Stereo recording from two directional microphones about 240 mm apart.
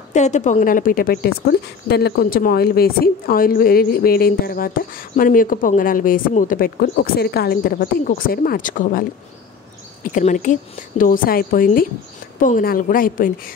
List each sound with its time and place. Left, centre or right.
0.1 s a woman's voice: left
10.0 s a woman's voice: left